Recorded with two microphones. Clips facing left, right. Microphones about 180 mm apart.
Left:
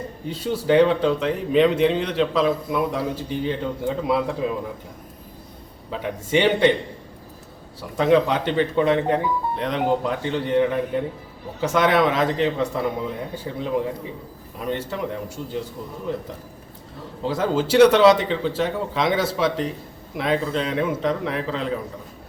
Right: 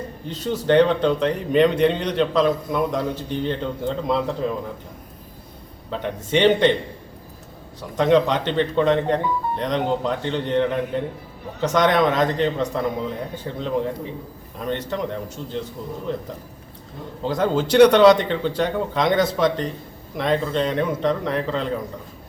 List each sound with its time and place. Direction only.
0.3 s speech: 10° left (ahead or behind)
5.9 s speech: 5° left (ahead or behind)
7.8 s speech: 5° left (ahead or behind)
17.2 s speech: 5° left (ahead or behind)